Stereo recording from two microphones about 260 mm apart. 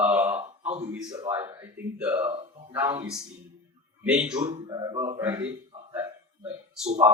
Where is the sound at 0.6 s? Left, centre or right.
Right.